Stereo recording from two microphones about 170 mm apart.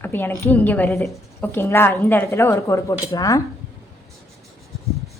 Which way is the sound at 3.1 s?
20° left (ahead or behind).